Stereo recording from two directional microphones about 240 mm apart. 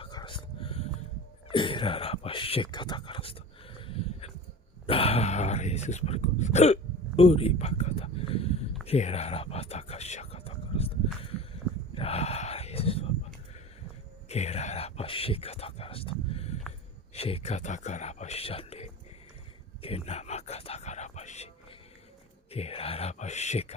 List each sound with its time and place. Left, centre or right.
0.0 s dog: centre
1.5 s speech: left
7.2 s a sound: left
8.9 s whispering: left
11.9 s gasp: left
14.3 s a sound: left
17.2 s speech: left
19.8 s whispering: left
22.5 s speech: left